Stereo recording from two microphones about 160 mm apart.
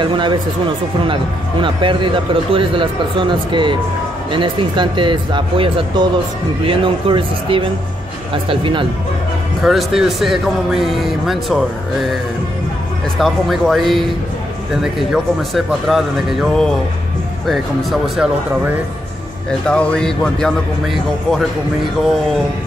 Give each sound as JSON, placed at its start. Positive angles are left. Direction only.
{"t": 0.0, "sound": "a man's voice", "side_deg": -30}
{"t": 9.6, "sound": "speech", "side_deg": 0}
{"t": 13.2, "sound": "speech", "side_deg": 0}
{"t": 19.7, "sound": "speech", "side_deg": 5}